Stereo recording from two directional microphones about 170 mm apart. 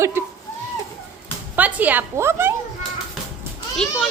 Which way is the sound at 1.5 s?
10° right (ahead or behind).